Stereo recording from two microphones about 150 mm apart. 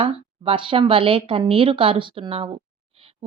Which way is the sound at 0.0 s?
35° right (ahead or behind).